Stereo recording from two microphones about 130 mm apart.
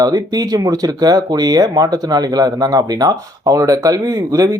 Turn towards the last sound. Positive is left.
turn(degrees=-25)  # may be behind; listen again after turning